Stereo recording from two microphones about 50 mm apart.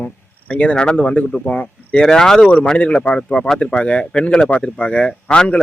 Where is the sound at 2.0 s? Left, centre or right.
Centre.